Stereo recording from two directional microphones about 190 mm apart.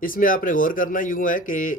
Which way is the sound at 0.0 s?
45° left (ahead or behind).